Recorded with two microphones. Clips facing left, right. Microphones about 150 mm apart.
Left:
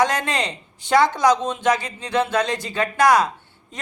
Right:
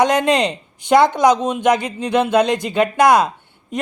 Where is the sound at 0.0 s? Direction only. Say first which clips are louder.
Right 6 dB; 20° right (ahead or behind).